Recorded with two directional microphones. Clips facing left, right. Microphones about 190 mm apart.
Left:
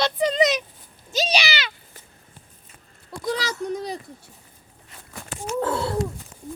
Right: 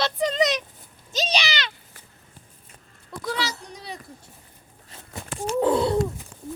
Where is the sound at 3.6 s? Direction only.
50° left (ahead or behind).